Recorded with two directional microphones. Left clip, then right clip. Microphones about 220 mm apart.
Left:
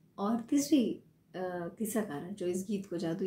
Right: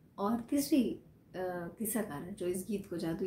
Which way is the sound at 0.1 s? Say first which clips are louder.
Left 2 dB; centre (ahead or behind).